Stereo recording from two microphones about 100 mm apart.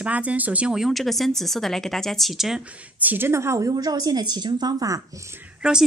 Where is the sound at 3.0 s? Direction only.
20° right (ahead or behind); by 5.0 s 35° right (ahead or behind).